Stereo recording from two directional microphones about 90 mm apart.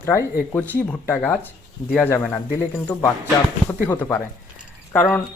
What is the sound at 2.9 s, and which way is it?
Speech, 25° left (ahead or behind).